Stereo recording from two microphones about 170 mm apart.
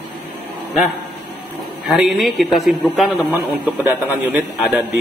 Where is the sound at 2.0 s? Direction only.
Centre (ahead or behind).